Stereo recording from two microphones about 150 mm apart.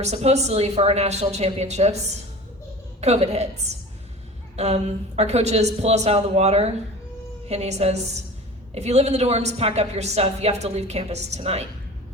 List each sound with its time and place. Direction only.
0.0 s a woman's voice: 45° right (ahead or behind)
3.0 s a woman's voice: 45° right (ahead or behind)
4.5 s a woman's voice: 45° right (ahead or behind)